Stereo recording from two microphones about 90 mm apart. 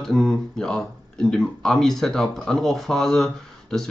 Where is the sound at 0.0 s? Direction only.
5° left (ahead or behind).